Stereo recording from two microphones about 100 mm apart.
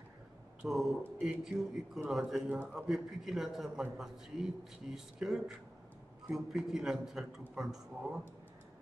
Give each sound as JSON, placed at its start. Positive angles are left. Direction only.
{"t": 0.6, "sound": "speech", "side_deg": -5}